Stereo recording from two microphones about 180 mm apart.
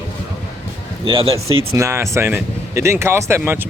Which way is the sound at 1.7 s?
15° right (ahead or behind).